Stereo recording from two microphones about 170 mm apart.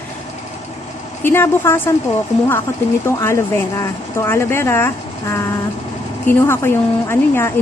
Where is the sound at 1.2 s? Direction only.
15° left (ahead or behind).